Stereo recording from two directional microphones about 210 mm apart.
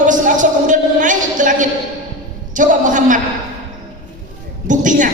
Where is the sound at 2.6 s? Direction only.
35° right (ahead or behind).